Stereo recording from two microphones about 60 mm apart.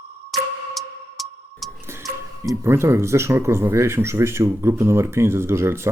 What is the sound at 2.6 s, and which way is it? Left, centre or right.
Speech, right.